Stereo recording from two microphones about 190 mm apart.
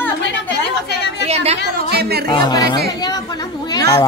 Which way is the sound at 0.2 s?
65° left (ahead or behind).